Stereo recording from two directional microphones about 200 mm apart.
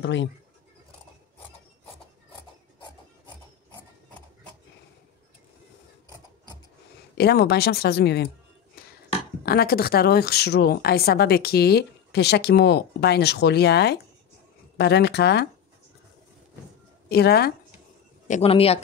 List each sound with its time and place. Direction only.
0.0 s speech: 65° left (ahead or behind)
7.2 s speech: 55° left (ahead or behind)
9.5 s speech: 50° left (ahead or behind)
17.1 s speech: 50° left (ahead or behind)
18.3 s speech: 30° left (ahead or behind)